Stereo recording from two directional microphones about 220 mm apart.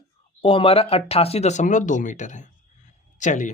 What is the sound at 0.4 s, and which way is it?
Speech, 25° left (ahead or behind).